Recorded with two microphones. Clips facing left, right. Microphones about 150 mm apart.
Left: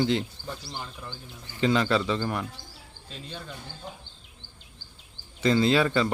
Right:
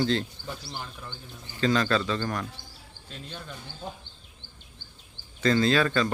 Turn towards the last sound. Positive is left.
turn(degrees=20)  # may be behind; listen again after turning